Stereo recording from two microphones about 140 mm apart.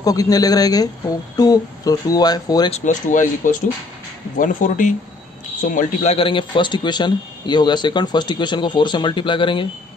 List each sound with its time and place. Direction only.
0.0 s speech: 25° left (ahead or behind)
2.7 s speech: 65° left (ahead or behind)
6.1 s a man's voice: 40° left (ahead or behind)